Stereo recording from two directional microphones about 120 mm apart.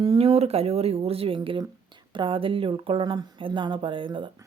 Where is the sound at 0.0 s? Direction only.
50° right (ahead or behind).